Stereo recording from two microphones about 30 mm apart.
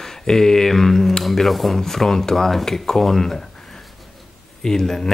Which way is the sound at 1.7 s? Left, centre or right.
Centre.